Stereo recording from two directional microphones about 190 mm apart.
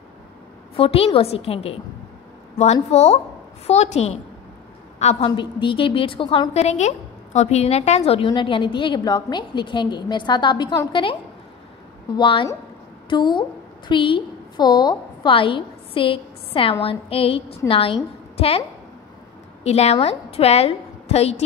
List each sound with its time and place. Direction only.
0.7 s a woman's voice: 30° left (ahead or behind)
12.2 s a woman's voice: 25° left (ahead or behind)
19.6 s a woman's voice: 35° left (ahead or behind)